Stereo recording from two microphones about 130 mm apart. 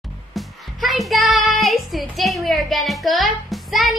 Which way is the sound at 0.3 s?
Centre (ahead or behind).